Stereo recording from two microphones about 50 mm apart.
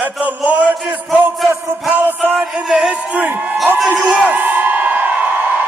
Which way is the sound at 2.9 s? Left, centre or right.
Right.